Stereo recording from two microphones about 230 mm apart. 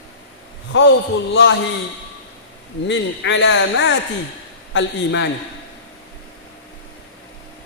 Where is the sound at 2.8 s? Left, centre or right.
Left.